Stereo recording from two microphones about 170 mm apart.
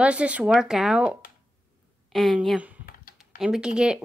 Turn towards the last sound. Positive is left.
turn(degrees=-5)  # may be behind; listen again after turning